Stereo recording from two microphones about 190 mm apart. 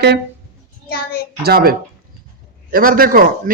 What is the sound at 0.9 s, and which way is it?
Speech, 55° left (ahead or behind).